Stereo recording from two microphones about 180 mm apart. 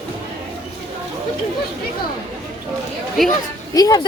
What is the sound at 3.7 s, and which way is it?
Speech, 20° left (ahead or behind).